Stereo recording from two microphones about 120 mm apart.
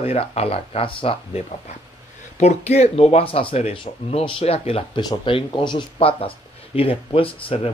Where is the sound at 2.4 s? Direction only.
65° left (ahead or behind).